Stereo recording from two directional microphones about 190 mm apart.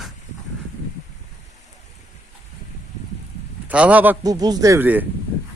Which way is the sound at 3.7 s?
5° right (ahead or behind).